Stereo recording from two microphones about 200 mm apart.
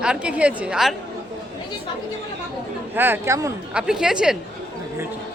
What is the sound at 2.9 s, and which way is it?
Speech, 10° right (ahead or behind).